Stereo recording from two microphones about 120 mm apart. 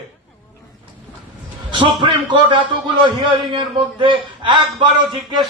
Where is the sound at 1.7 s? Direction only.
45° right (ahead or behind).